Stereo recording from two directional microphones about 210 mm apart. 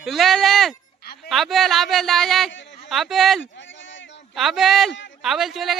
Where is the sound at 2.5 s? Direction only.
60° left (ahead or behind).